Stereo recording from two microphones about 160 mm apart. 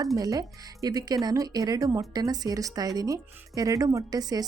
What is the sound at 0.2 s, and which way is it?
Speech, 20° right (ahead or behind).